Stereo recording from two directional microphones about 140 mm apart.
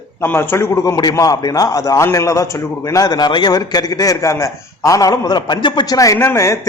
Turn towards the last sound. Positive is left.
turn(degrees=20)  # may be behind; listen again after turning